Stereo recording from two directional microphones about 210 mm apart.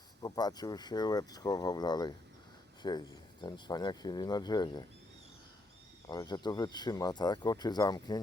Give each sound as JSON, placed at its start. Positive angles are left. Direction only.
{"t": 0.2, "sound": "speech", "side_deg": 20}
{"t": 6.1, "sound": "speech", "side_deg": 20}